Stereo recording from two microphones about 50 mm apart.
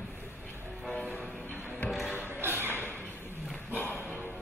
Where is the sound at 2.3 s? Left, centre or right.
Right.